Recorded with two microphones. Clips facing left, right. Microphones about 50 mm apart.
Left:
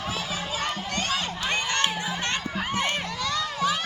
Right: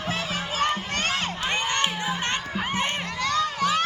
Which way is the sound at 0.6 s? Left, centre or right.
Right.